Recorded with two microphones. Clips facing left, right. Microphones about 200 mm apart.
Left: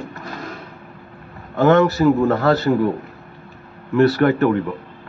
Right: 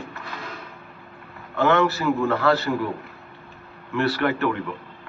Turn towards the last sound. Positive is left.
turn(degrees=45)  # may be behind; listen again after turning